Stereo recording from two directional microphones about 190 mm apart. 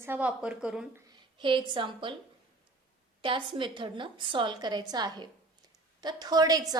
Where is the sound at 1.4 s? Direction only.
25° right (ahead or behind).